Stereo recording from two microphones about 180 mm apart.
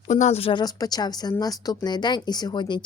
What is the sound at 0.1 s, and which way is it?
Speech, 40° left (ahead or behind).